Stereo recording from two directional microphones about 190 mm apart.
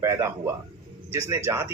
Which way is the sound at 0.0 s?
15° right (ahead or behind).